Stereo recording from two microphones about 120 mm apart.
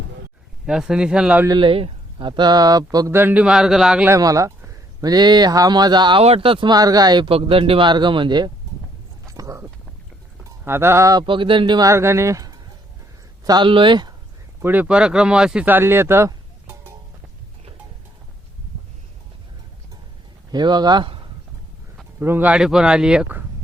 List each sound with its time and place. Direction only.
0.6 s speech: 5° right (ahead or behind)
1.5 s speech: 45° right (ahead or behind)
3.1 s speech: 20° right (ahead or behind)
4.2 s speech: 30° right (ahead or behind)
6.2 s a man's voice: 55° right (ahead or behind)
6.7 s speech: 30° right (ahead or behind)
7.3 s a man's voice: 50° right (ahead or behind)
9.2 s a sound: 30° right (ahead or behind)
10.6 s speech: 20° right (ahead or behind)
11.2 s speech: 45° right (ahead or behind)
11.9 s speech: 20° right (ahead or behind); by 14.1 s 40° right (ahead or behind)
14.6 s speech: 15° right (ahead or behind)
20.5 s speech: 35° right (ahead or behind)
22.2 s speech: 15° right (ahead or behind)